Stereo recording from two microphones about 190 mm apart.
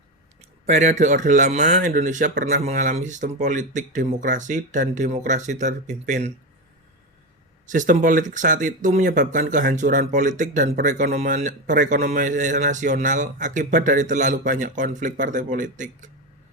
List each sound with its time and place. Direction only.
0.6 s speech: 35° right (ahead or behind)
7.7 s speech: 45° right (ahead or behind)